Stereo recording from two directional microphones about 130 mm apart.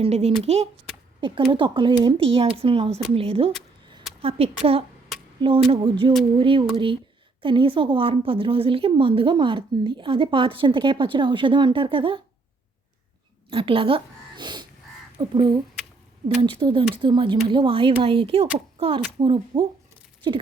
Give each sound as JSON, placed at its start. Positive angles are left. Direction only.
{"t": 0.0, "sound": "speech", "side_deg": -50}
{"t": 1.2, "sound": "speech", "side_deg": -40}
{"t": 13.5, "sound": "speech", "side_deg": -45}